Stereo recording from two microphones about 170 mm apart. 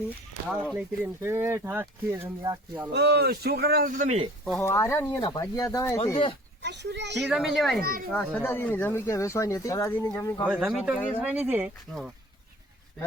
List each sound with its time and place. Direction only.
0.4 s speech: 5° right (ahead or behind)
2.4 s speech: 25° right (ahead or behind)
2.9 s speech: 75° right (ahead or behind); by 4.3 s 45° right (ahead or behind)
4.6 s speech: 15° left (ahead or behind)
6.6 s a child's voice: 90° right
7.2 s speech: centre (ahead or behind)
7.8 s speech: 60° right (ahead or behind)
8.1 s speech: 5° left (ahead or behind)
10.6 s speech: 5° right (ahead or behind)